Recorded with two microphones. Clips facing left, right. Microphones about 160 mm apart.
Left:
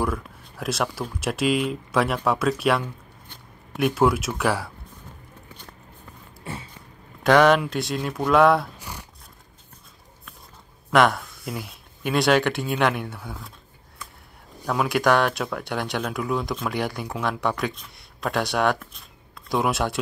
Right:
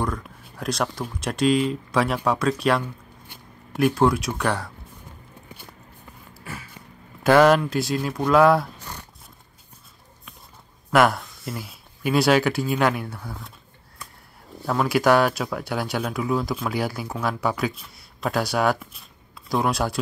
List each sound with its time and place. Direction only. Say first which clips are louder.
0.0 s speech: left 1 dB; 5° left (ahead or behind)
6.4 s a sound: left 3 dB; 25° left (ahead or behind)
7.2 s speech: right 1 dB; 5° right (ahead or behind)
8.7 s a sound: even; 10° left (ahead or behind)
10.9 s speech: even; 5° right (ahead or behind)
14.7 s speech: right 2 dB; centre (ahead or behind)